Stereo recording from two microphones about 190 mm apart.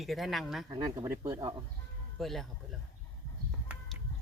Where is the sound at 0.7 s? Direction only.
20° right (ahead or behind).